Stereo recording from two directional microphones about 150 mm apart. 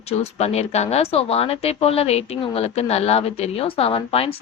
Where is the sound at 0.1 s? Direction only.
45° left (ahead or behind).